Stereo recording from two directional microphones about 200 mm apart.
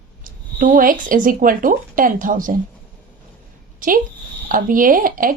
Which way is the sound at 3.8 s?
45° right (ahead or behind).